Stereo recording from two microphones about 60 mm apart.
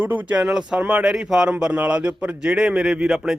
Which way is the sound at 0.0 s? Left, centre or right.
Right.